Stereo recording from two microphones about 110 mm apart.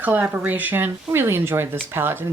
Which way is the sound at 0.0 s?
15° right (ahead or behind).